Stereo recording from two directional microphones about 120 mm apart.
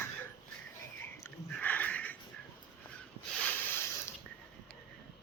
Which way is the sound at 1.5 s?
15° left (ahead or behind).